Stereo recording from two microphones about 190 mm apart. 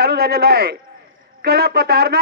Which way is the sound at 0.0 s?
55° right (ahead or behind).